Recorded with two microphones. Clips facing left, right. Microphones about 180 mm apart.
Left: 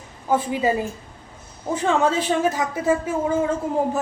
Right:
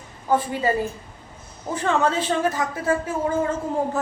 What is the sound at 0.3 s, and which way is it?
Speech, 15° left (ahead or behind).